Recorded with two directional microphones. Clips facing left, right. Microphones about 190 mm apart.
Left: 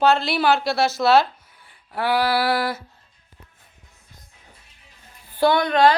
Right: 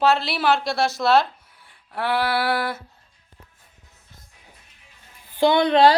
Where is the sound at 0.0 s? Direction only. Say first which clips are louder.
Left 2 dB; centre (ahead or behind).